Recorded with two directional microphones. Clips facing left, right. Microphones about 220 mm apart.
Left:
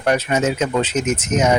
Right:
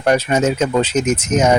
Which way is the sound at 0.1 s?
40° right (ahead or behind).